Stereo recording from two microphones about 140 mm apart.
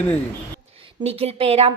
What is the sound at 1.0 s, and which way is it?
Speech, 45° right (ahead or behind).